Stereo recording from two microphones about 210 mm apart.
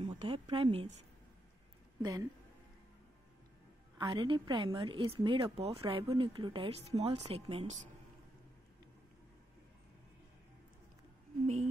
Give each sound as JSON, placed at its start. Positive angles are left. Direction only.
{"t": 0.2, "sound": "a sound", "side_deg": -25}
{"t": 2.0, "sound": "speech", "side_deg": -20}
{"t": 4.0, "sound": "speech", "side_deg": -25}
{"t": 11.4, "sound": "speech", "side_deg": -30}